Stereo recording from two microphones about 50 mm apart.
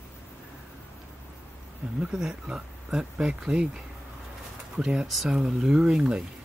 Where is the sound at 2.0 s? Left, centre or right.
Centre.